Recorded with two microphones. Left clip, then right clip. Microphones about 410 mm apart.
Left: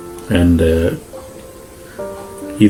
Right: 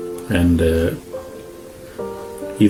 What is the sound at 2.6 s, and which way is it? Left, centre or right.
Speech, right.